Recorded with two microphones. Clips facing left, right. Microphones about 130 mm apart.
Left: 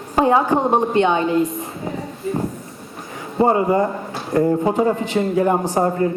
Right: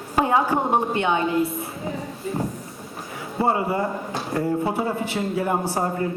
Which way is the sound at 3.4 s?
40° left (ahead or behind).